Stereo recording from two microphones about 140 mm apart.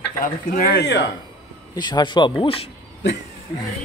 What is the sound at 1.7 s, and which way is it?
Speech, 30° left (ahead or behind).